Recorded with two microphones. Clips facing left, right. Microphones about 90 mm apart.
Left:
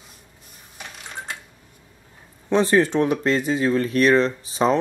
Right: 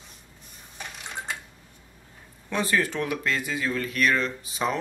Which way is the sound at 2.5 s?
30° left (ahead or behind).